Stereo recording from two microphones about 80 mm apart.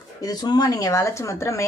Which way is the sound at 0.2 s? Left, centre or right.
Left.